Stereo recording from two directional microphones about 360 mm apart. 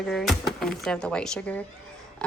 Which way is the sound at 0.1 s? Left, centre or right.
Centre.